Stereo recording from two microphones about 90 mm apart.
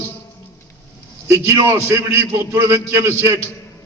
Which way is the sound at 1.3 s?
30° right (ahead or behind).